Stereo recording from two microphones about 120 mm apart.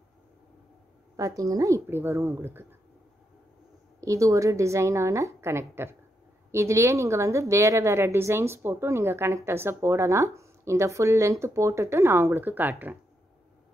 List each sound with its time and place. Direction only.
1.1 s speech: 30° right (ahead or behind)
4.0 s speech: 25° right (ahead or behind)